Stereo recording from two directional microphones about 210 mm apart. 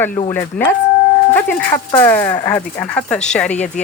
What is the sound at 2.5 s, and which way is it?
Speech, 5° left (ahead or behind).